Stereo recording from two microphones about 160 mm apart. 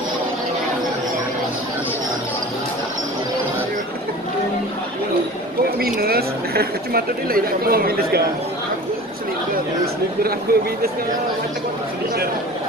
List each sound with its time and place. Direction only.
5.9 s speech: 75° right (ahead or behind)
10.5 s speech: 75° right (ahead or behind)